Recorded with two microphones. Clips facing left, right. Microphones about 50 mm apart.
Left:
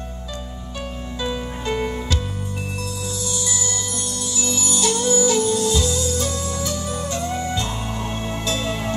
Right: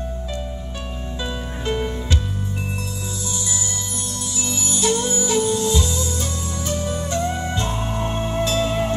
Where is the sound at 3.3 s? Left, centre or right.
Right.